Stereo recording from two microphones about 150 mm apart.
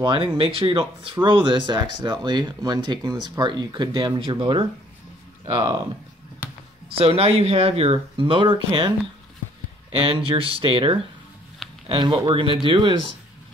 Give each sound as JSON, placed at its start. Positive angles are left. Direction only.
{"t": 0.0, "sound": "speech", "side_deg": -35}
{"t": 6.9, "sound": "speech", "side_deg": -40}